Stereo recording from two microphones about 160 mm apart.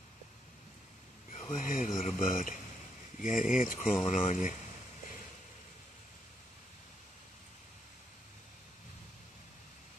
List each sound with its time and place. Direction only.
1.3 s speech: 50° left (ahead or behind)